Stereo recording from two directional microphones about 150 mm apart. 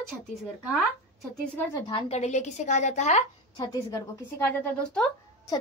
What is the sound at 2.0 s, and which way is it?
A woman's voice, 45° left (ahead or behind).